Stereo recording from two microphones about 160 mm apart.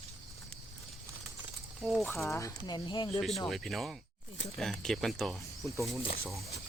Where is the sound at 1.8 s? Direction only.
5° left (ahead or behind).